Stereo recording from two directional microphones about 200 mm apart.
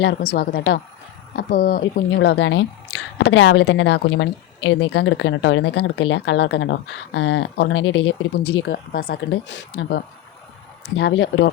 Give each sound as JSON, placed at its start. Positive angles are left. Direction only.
{"t": 0.0, "sound": "a woman's voice", "side_deg": 50}